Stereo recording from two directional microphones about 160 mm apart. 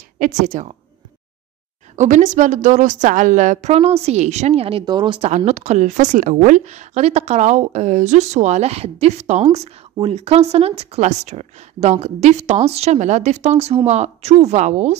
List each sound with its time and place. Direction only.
0.2 s a woman's voice: 50° right (ahead or behind)
2.0 s a woman's voice: 50° right (ahead or behind); by 5.3 s 30° right (ahead or behind)
5.3 s a woman's voice: 45° right (ahead or behind)